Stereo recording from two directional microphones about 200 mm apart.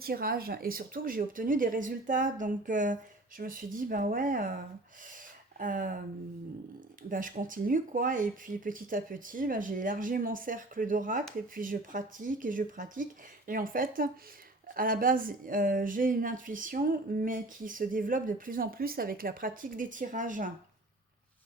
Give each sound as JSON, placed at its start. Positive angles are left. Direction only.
{"t": 0.0, "sound": "speech", "side_deg": -50}
{"t": 5.5, "sound": "speech", "side_deg": -40}
{"t": 7.1, "sound": "speech", "side_deg": -40}